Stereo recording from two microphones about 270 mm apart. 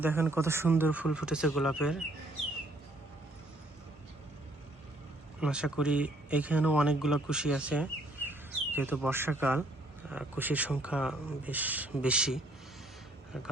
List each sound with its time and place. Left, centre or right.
0.0 s speech: centre
5.4 s speech: centre